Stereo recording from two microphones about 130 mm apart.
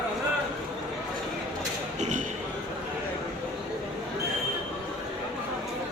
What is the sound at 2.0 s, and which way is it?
Basketball bounce, 70° right (ahead or behind).